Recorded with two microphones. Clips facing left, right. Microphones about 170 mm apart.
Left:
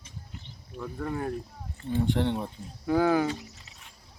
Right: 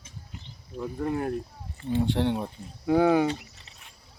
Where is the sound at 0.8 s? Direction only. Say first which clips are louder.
Right 4 dB; 20° right (ahead or behind).